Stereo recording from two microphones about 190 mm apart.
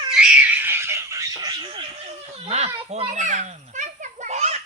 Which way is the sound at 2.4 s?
35° right (ahead or behind).